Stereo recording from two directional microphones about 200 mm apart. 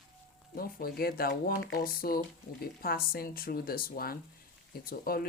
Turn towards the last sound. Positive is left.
turn(degrees=50)  # may be behind; listen again after turning